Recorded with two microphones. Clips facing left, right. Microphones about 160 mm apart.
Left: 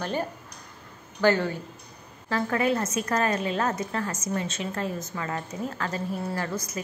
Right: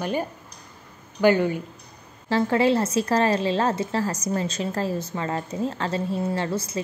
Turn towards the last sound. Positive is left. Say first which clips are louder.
# right 5 dB
turn(degrees=-30)  # may be behind; listen again after turning